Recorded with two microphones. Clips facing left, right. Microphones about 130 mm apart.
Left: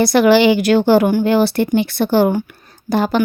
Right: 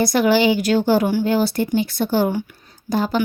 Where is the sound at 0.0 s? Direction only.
80° left.